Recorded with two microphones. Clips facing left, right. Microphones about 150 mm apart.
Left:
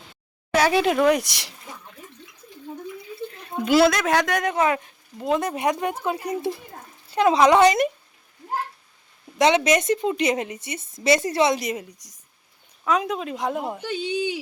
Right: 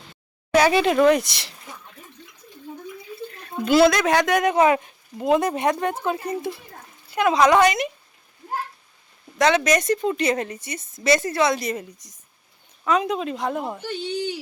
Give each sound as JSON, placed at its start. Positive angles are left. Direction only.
{"t": 0.5, "sound": "speech", "side_deg": 5}
{"t": 3.6, "sound": "speech", "side_deg": 10}
{"t": 4.4, "sound": "speech", "side_deg": -15}
{"t": 5.5, "sound": "speech", "side_deg": 10}
{"t": 7.1, "sound": "a woman's voice", "side_deg": 30}
{"t": 9.4, "sound": "a woman's voice", "side_deg": 25}
{"t": 12.8, "sound": "speech", "side_deg": 5}